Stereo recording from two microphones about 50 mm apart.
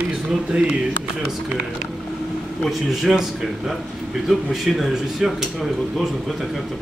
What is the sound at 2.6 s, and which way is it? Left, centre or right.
Speech, centre.